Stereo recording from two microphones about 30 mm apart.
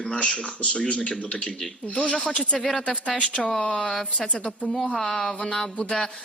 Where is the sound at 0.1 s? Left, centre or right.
Left.